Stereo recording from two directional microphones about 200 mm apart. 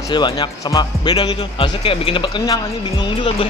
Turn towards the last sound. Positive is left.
turn(degrees=25)  # may be behind; listen again after turning